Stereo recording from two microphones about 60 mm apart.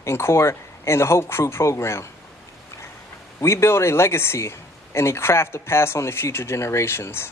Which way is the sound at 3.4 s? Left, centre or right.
Left.